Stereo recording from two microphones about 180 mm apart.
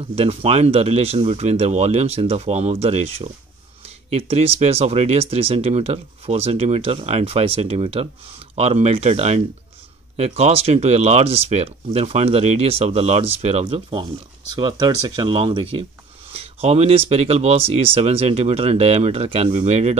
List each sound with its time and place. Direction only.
0.1 s speech: 35° right (ahead or behind)